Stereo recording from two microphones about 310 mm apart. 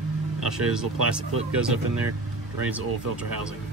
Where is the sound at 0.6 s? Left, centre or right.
Centre.